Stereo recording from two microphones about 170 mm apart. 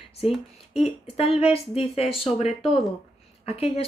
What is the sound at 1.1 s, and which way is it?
Speech, 35° left (ahead or behind).